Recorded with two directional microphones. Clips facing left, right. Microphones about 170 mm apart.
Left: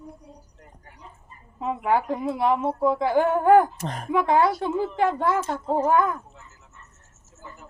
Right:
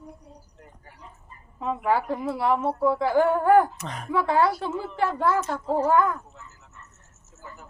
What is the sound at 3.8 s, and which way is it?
Speech, 45° left (ahead or behind).